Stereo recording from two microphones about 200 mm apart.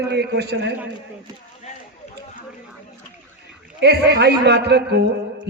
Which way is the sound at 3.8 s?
55° right (ahead or behind).